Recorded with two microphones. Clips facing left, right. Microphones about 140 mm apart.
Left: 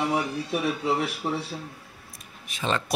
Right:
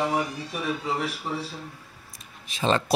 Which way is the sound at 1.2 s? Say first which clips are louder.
Left 3 dB; 50° left (ahead or behind).